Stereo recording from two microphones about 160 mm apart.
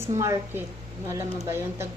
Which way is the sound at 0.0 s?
20° right (ahead or behind).